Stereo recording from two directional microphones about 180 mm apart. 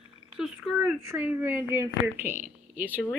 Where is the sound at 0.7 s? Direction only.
10° right (ahead or behind).